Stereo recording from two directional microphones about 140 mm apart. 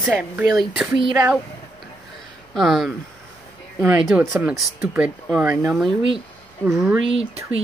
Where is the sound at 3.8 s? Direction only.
15° right (ahead or behind).